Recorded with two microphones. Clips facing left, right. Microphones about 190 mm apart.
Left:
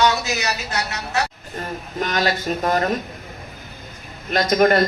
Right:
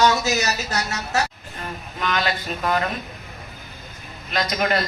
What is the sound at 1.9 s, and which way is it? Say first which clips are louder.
Speech: left 3 dB; 40° left (ahead or behind).